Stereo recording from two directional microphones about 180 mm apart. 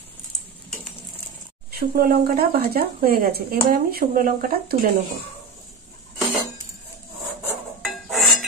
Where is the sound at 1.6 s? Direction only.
55° right (ahead or behind).